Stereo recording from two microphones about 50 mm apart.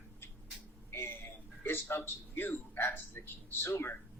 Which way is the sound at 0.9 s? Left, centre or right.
Left.